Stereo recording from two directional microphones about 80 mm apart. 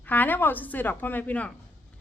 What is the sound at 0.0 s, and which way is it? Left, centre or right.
A woman's voice, left.